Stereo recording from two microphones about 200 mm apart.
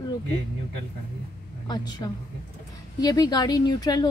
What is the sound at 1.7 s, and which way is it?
A woman's voice, 20° left (ahead or behind).